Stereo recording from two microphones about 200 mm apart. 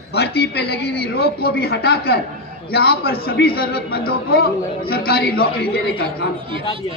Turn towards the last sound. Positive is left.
turn(degrees=-25)  # may be behind; listen again after turning